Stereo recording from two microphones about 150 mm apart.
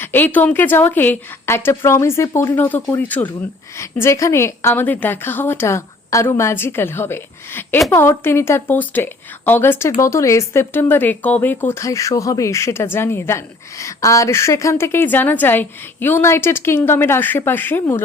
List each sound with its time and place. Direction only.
0.0 s speech: 15° left (ahead or behind)